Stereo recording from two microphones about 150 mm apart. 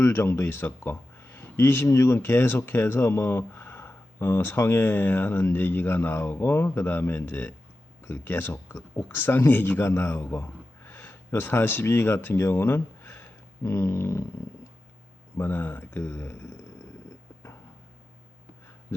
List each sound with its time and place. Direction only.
0.0 s speech: 15° left (ahead or behind)
13.7 s a sound: 20° left (ahead or behind)
15.4 s speech: 15° left (ahead or behind)